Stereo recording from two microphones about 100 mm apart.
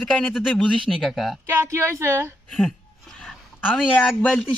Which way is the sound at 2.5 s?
5° left (ahead or behind).